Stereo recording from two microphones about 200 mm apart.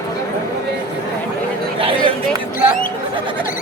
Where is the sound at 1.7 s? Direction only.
25° right (ahead or behind).